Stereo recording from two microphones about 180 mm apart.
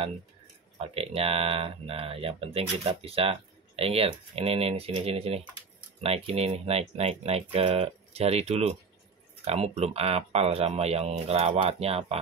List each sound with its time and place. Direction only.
0.7 s speech: 35° right (ahead or behind)